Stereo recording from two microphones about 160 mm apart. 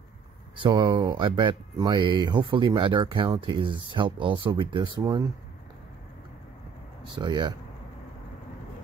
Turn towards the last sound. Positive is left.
turn(degrees=-30)  # may be behind; listen again after turning